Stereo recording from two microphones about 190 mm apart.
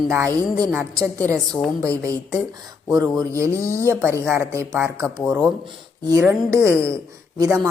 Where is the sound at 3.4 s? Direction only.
15° right (ahead or behind).